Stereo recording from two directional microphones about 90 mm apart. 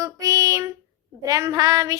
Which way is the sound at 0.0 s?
40° right (ahead or behind).